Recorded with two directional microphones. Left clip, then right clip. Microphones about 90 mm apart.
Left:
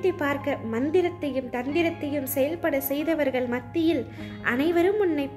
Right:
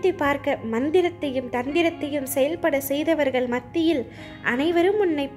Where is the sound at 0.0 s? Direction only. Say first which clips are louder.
Right 3 dB; 45° right (ahead or behind).